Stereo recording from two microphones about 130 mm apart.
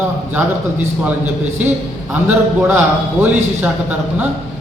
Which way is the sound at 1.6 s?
10° right (ahead or behind).